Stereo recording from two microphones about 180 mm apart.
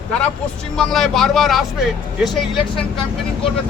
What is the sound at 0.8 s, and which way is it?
Speech, centre (ahead or behind).